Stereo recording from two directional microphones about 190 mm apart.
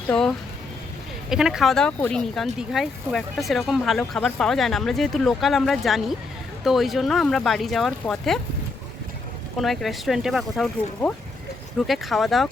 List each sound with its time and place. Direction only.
0.1 s speech: 5° left (ahead or behind)
9.6 s speech: centre (ahead or behind)